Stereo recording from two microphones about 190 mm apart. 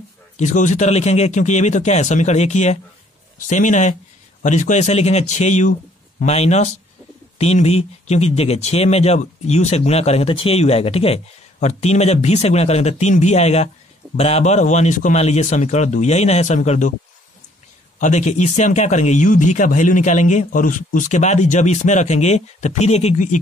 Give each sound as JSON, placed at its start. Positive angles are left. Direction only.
{"t": 0.4, "sound": "speech", "side_deg": 40}
{"t": 17.9, "sound": "speech", "side_deg": 40}